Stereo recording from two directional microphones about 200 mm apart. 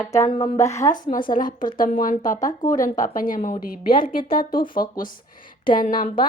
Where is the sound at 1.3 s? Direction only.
45° left (ahead or behind).